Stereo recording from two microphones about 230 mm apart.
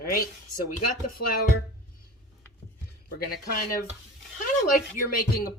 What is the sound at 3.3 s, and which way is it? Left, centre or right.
Speech, left.